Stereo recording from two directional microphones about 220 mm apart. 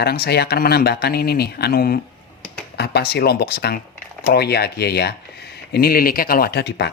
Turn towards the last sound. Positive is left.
turn(degrees=50)  # may be behind; listen again after turning